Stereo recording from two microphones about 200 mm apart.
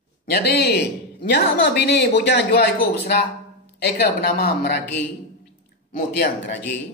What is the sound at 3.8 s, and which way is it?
Speech, 50° left (ahead or behind).